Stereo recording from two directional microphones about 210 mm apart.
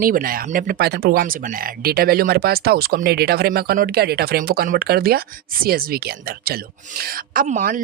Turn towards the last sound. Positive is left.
turn(degrees=-40)  # may be behind; listen again after turning